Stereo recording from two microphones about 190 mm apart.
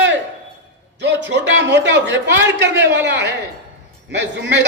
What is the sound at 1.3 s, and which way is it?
A man's voice, 70° right (ahead or behind).